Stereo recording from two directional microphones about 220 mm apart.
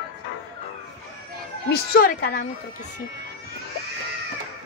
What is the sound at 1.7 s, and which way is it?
Speech, 45° left (ahead or behind).